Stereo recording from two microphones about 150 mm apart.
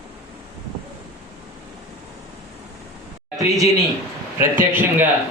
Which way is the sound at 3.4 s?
25° right (ahead or behind).